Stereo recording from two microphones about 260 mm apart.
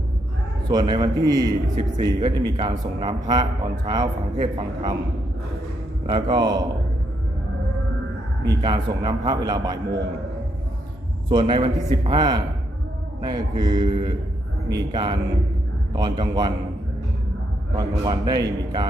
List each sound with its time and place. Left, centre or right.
0.7 s a man's voice: centre
6.1 s a man's voice: centre
8.4 s a man's voice: centre
11.3 s a man's voice: centre
17.7 s a man's voice: centre